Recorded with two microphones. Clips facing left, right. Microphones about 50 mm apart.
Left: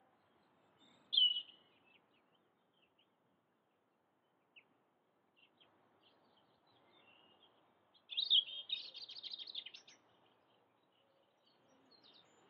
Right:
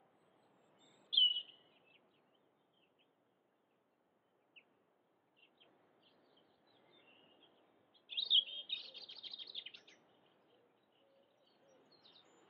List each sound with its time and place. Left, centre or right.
0.1 s a sound: centre
0.9 s bird vocalization: centre
8.1 s chirp: centre
11.7 s bird: centre